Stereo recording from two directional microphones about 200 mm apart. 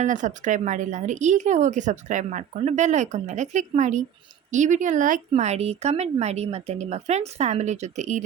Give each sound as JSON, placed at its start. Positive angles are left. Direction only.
{"t": 0.0, "sound": "a woman's voice", "side_deg": -40}